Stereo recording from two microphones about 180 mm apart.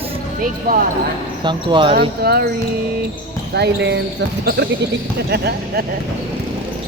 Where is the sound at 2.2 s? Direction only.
60° right (ahead or behind).